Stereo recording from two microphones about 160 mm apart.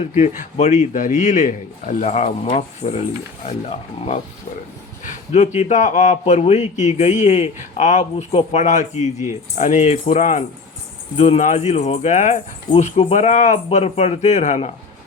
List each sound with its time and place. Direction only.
0.0 s a man's voice: 45° left (ahead or behind)
5.0 s a sound: 45° left (ahead or behind)
5.5 s a man's voice: 45° left (ahead or behind)